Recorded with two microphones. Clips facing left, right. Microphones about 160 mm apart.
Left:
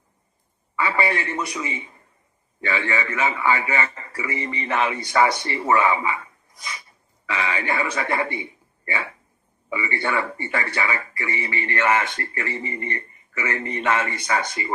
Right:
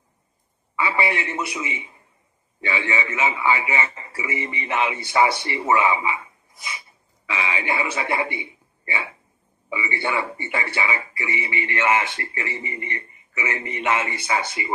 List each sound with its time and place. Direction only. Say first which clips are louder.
0.7 s speech: left 1 dB; 15° right (ahead or behind)
2.6 s a man's voice: left 1 dB; 25° right (ahead or behind)
7.2 s a man's voice: left 1 dB; 15° right (ahead or behind)
9.7 s a man's voice: left 1 dB; 15° right (ahead or behind)
10.4 s speech: left 1 dB; 25° right (ahead or behind)
14.2 s a man's voice: even; 10° right (ahead or behind)